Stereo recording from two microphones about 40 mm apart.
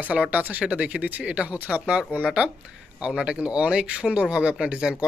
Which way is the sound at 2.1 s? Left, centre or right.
Left.